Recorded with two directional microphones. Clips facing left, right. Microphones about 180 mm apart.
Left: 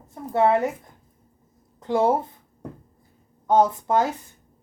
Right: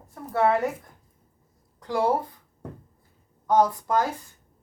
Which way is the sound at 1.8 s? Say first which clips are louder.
Left 3 dB; 20° left (ahead or behind).